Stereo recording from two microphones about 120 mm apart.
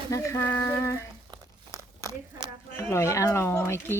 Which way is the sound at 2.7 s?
20° left (ahead or behind).